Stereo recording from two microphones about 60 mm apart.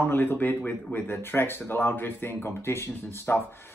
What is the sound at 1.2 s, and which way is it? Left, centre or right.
Speech, left.